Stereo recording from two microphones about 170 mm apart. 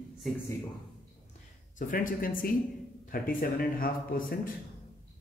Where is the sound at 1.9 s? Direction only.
55° left (ahead or behind).